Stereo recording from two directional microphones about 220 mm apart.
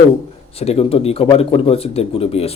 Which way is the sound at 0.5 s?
25° left (ahead or behind).